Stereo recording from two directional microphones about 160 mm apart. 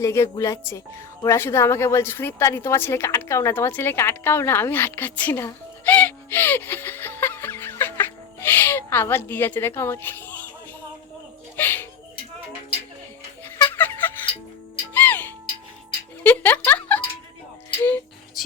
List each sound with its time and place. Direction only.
0.0 s a woman's voice: 20° left (ahead or behind)
11.5 s music: 10° left (ahead or behind)
13.4 s music: 15° left (ahead or behind)
16.2 s speech: 10° left (ahead or behind)